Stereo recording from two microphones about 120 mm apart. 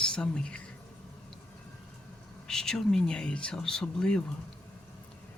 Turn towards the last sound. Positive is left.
turn(degrees=5)  # may be behind; listen again after turning